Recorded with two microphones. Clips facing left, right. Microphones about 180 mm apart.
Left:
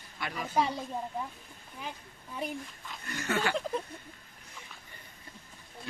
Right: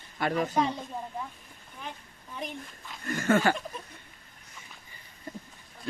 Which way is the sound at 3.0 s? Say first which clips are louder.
Right 7 dB; 50° right (ahead or behind).